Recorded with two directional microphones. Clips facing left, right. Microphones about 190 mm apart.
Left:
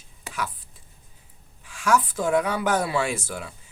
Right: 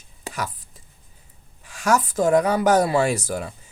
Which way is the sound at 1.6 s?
40° right (ahead or behind).